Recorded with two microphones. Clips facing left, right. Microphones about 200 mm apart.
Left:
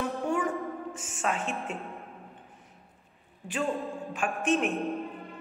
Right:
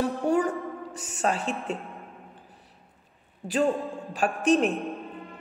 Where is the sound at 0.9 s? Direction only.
35° right (ahead or behind).